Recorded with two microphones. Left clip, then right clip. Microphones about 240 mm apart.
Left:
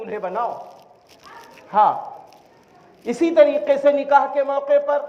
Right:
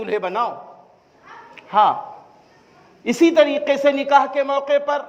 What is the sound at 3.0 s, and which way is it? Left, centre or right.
A man's voice, right.